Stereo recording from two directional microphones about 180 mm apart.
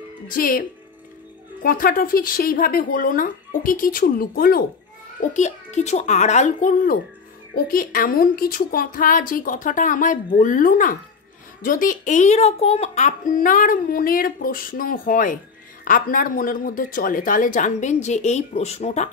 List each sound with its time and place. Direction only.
0.3 s a child's voice: 50° left (ahead or behind)
5.2 s a child's voice: 40° left (ahead or behind)